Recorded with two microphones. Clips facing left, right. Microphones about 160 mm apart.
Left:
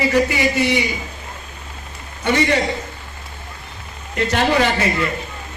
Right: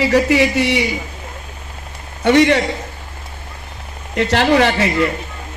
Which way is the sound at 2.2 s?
75° right (ahead or behind).